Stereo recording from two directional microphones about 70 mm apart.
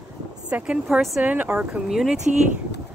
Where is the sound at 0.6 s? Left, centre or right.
Centre.